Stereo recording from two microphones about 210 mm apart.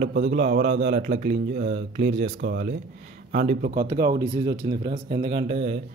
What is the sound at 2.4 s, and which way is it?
Speech, 50° right (ahead or behind).